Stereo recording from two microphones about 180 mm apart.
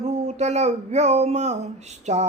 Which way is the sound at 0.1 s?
40° right (ahead or behind).